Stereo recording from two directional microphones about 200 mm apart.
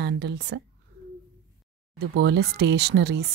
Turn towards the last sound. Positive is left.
turn(degrees=-55)  # may be behind; listen again after turning